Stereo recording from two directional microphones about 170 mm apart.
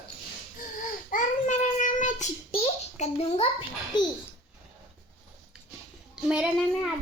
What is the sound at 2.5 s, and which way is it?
A child's voice, 40° left (ahead or behind).